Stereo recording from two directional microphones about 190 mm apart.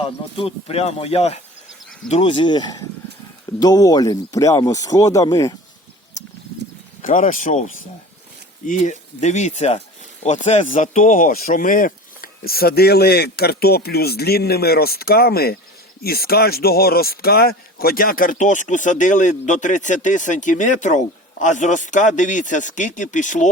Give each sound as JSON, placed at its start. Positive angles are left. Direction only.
{"t": 0.3, "sound": "a man's voice", "side_deg": 30}
{"t": 7.3, "sound": "speech", "side_deg": 45}
{"t": 8.6, "sound": "a man's voice", "side_deg": 40}